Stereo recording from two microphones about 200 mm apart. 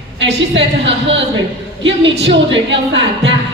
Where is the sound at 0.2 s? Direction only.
65° right (ahead or behind).